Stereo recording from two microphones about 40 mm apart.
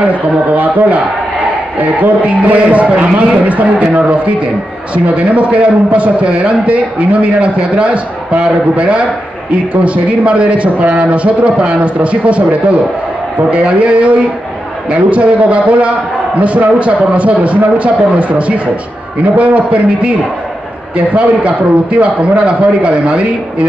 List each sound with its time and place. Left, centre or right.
0.1 s a man's voice: right
13.5 s a man's voice: right